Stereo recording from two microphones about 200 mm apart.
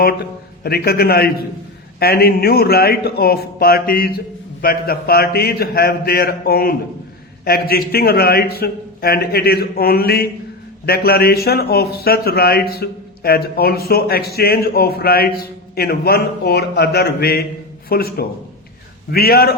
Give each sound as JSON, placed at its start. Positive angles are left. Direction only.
{"t": 0.0, "sound": "a man's voice", "side_deg": 50}